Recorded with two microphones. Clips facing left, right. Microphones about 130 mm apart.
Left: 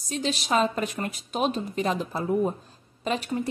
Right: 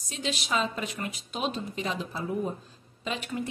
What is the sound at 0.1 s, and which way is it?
A woman's voice, 40° left (ahead or behind).